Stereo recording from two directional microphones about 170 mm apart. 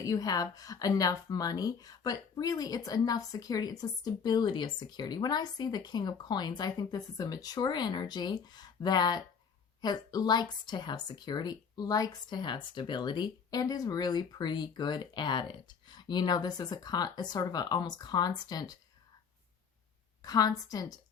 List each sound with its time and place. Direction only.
0.0 s speech: 20° left (ahead or behind)
20.2 s speech: 20° left (ahead or behind)